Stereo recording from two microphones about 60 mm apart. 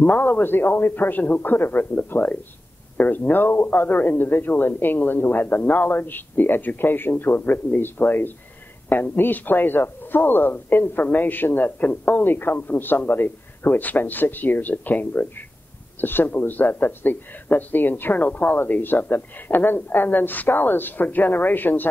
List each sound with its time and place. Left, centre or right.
0.0 s speech: left